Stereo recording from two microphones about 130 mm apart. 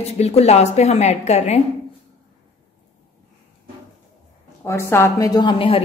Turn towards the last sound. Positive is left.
turn(degrees=40)  # may be behind; listen again after turning